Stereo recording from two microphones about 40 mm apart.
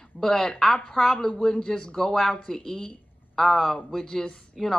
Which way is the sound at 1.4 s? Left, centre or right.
Centre.